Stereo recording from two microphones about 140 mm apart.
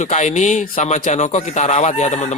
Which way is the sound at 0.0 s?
60° left (ahead or behind).